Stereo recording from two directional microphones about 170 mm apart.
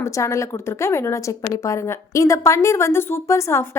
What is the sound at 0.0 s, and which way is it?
A woman's voice, 15° left (ahead or behind).